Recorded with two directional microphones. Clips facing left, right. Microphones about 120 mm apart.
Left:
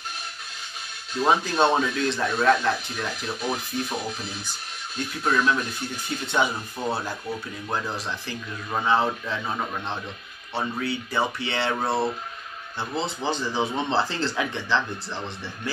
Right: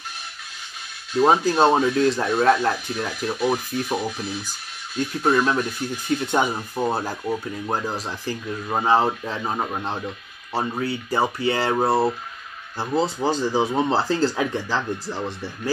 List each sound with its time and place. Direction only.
1.2 s speech: 35° right (ahead or behind)
5.2 s speech: 40° right (ahead or behind)